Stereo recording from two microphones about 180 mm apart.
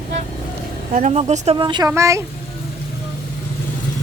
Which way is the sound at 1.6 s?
25° right (ahead or behind).